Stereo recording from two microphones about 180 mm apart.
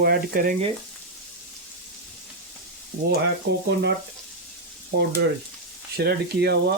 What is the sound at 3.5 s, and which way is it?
Speech, 90° right.